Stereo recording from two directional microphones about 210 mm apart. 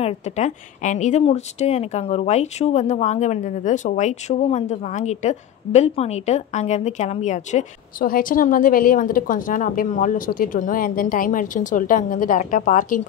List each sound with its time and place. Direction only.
0.0 s a woman's voice: 35° left (ahead or behind)